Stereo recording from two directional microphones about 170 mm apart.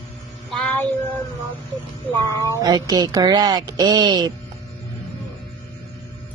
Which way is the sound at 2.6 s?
20° right (ahead or behind).